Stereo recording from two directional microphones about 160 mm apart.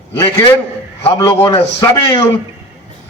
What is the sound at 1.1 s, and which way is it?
A man's voice, 20° left (ahead or behind).